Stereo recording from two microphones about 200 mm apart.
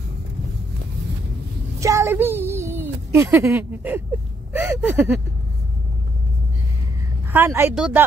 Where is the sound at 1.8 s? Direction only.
15° right (ahead or behind).